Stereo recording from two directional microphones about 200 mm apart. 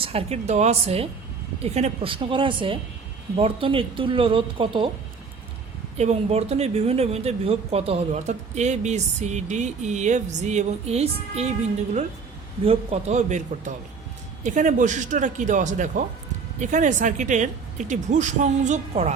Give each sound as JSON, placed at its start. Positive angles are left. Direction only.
{"t": 0.0, "sound": "speech", "side_deg": -30}
{"t": 6.0, "sound": "speech", "side_deg": -30}
{"t": 12.6, "sound": "speech", "side_deg": -30}